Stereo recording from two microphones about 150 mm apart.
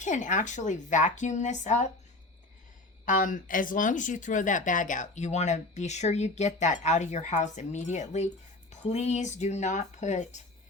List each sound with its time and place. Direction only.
0.0 s a woman's voice: 55° left (ahead or behind)
3.1 s speech: 60° left (ahead or behind)